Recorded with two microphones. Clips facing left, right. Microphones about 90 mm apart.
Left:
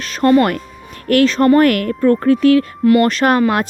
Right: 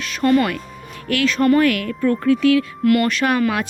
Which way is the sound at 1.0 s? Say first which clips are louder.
Left 5 dB; 40° left (ahead or behind).